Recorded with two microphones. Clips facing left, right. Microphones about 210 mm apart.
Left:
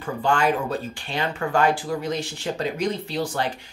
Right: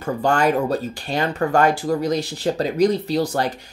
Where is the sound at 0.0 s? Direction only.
40° right (ahead or behind).